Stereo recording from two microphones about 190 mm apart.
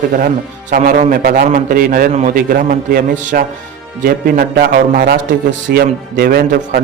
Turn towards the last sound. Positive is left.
turn(degrees=-50)  # may be behind; listen again after turning